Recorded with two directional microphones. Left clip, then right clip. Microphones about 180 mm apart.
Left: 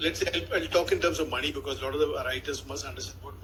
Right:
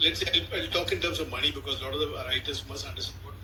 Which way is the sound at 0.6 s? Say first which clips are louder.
Left 3 dB; 25° left (ahead or behind).